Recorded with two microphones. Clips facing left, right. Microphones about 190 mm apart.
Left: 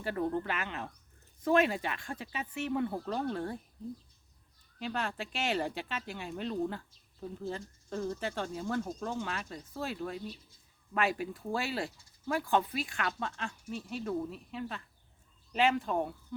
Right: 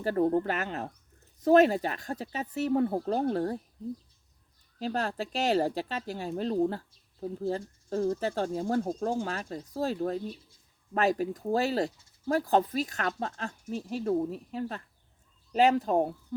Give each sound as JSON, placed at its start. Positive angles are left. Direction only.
{"t": 0.0, "sound": "speech", "side_deg": -40}
{"t": 4.8, "sound": "speech", "side_deg": -40}